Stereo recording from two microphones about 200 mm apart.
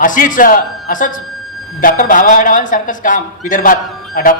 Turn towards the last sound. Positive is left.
turn(degrees=45)  # may be behind; listen again after turning